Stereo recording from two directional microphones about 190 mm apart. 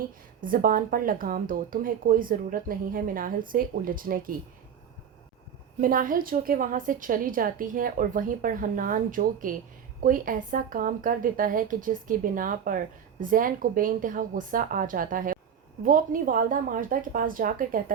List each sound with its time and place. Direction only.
0.4 s a woman's voice: 45° right (ahead or behind)
5.8 s a woman's voice: 45° right (ahead or behind)